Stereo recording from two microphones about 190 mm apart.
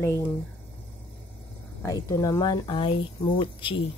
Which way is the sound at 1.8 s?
15° left (ahead or behind).